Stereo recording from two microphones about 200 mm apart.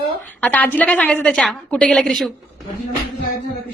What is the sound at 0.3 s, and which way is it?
A woman's voice, 10° left (ahead or behind).